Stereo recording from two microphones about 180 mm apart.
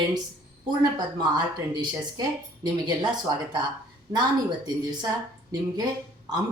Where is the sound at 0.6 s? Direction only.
25° right (ahead or behind).